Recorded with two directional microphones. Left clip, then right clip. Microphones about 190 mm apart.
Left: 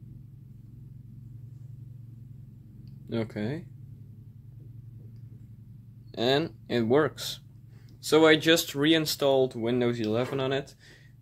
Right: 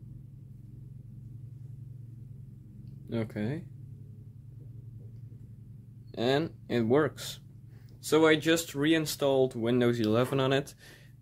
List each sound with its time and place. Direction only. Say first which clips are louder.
2.8 s speech: left 3 dB; 5° left (ahead or behind)
6.1 s speech: left 3 dB; centre (ahead or behind)
9.6 s speech: even; 15° right (ahead or behind)
9.8 s speech: right 1 dB; 30° right (ahead or behind)